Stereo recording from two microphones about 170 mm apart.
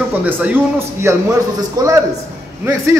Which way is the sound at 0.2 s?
10° right (ahead or behind).